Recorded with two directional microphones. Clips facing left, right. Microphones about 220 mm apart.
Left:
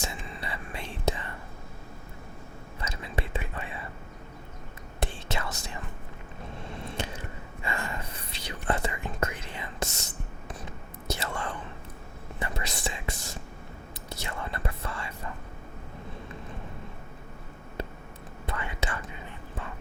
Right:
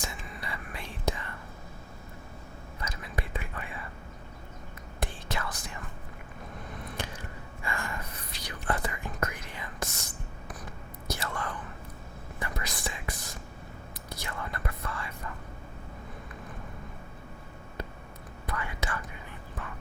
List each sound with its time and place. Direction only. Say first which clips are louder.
0.0 s whispering: left 3 dB; 25° left (ahead or behind)
2.8 s whispering: left 3 dB; 25° left (ahead or behind)
4.9 s whispering: left 2 dB; 25° left (ahead or behind)
6.6 s gasp: left 3 dB; 25° left (ahead or behind)
11.1 s whispering: left 2 dB; 25° left (ahead or behind)
18.4 s whispering: left 1 dB; 25° left (ahead or behind)